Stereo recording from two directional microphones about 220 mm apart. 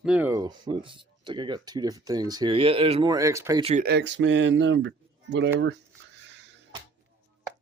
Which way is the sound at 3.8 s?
50° right (ahead or behind).